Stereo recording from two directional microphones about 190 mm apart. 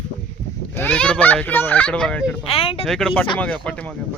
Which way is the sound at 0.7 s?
5° left (ahead or behind).